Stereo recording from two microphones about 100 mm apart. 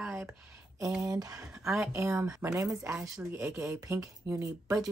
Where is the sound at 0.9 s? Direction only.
40° right (ahead or behind).